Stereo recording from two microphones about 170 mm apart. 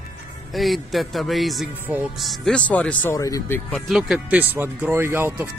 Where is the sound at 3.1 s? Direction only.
20° left (ahead or behind).